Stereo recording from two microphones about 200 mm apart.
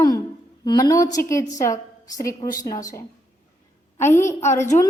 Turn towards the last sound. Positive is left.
turn(degrees=10)  # may be behind; listen again after turning